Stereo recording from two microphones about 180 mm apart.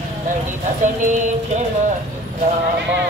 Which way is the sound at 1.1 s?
40° right (ahead or behind).